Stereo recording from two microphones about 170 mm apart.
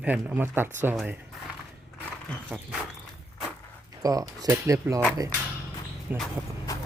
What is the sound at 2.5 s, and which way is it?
Speech, 10° right (ahead or behind).